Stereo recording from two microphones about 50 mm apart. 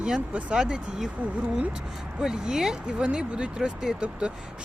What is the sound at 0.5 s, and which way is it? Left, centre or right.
Speech, centre.